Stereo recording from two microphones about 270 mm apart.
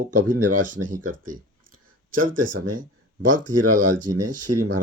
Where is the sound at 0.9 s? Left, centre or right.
Right.